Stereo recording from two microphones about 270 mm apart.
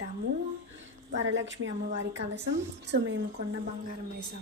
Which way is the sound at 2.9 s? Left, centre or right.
Right.